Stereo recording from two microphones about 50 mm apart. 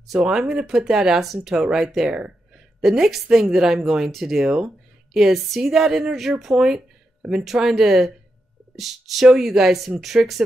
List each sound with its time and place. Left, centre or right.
0.0 s a woman's voice: centre
1.6 s a woman's voice: centre
1.9 s speech: centre
2.1 s a sound: centre
2.8 s a woman's voice: centre